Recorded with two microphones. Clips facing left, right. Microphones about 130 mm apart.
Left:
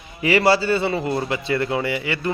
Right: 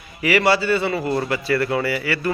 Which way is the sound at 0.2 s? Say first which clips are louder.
Left 1 dB; 30° left (ahead or behind).